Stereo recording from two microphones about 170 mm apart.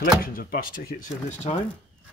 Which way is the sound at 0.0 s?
60° left (ahead or behind).